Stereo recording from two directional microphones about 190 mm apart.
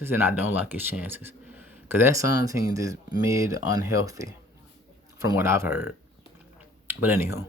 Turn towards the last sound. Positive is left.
turn(degrees=-15)  # may be behind; listen again after turning